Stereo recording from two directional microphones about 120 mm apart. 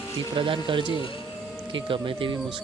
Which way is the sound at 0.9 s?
45° left (ahead or behind).